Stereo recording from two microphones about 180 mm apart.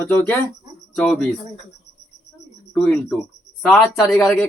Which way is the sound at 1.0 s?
5° left (ahead or behind).